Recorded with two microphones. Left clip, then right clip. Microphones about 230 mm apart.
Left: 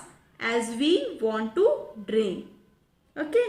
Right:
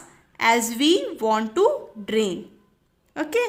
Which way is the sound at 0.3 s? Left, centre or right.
Right.